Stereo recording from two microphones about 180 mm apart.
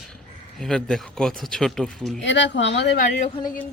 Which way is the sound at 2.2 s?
90° left.